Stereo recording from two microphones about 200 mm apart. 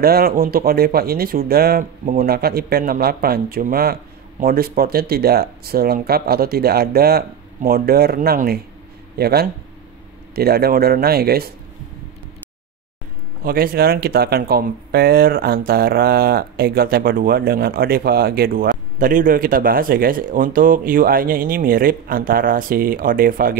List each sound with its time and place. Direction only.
0.0 s speech: 50° right (ahead or behind)
13.4 s speech: 45° right (ahead or behind)